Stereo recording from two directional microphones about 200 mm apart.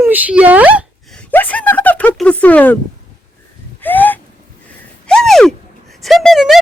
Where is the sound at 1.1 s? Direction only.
10° left (ahead or behind).